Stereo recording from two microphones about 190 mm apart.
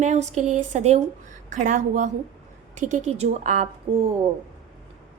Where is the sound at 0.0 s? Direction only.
40° right (ahead or behind).